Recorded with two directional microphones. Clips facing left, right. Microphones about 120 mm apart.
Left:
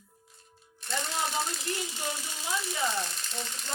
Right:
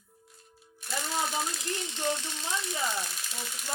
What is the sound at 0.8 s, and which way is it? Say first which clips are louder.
Speech: even; 5° right (ahead or behind).